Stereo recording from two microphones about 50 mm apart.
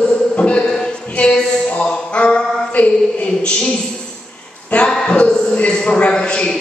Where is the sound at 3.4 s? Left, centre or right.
Centre.